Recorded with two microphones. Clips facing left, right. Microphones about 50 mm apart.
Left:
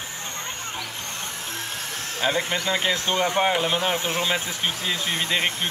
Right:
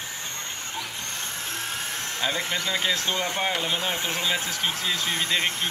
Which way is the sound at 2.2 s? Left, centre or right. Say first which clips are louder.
Left 4 dB; centre.